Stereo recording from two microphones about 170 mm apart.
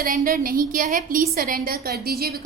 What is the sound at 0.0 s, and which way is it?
A woman's voice, 55° right (ahead or behind).